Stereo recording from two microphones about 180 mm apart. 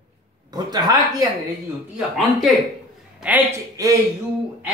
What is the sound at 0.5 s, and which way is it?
Speech, 25° right (ahead or behind).